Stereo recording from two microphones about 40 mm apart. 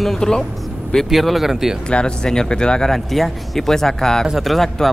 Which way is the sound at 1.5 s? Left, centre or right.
Centre.